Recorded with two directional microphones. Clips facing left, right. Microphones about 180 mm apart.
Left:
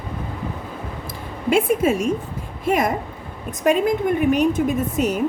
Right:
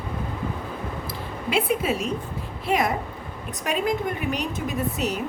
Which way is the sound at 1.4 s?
45° left (ahead or behind).